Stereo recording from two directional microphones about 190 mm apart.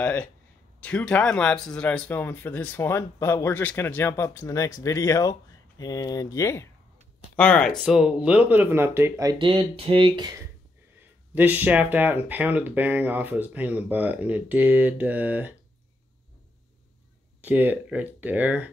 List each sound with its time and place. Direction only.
0.0 s speech: 5° left (ahead or behind); by 10.3 s 25° right (ahead or behind)
11.0 s speech: 10° right (ahead or behind)
17.4 s speech: 10° right (ahead or behind)